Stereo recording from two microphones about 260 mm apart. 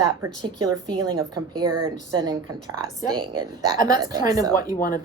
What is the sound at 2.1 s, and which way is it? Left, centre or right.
A woman's voice, centre.